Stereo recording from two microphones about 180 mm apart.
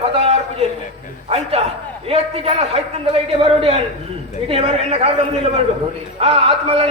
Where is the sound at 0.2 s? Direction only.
35° right (ahead or behind).